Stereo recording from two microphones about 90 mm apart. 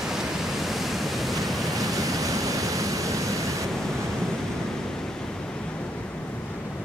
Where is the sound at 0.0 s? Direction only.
5° right (ahead or behind).